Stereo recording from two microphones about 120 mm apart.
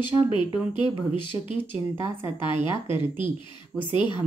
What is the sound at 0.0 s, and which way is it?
Speech, 40° left (ahead or behind).